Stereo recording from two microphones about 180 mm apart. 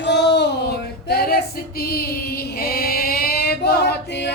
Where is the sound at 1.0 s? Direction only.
60° left (ahead or behind).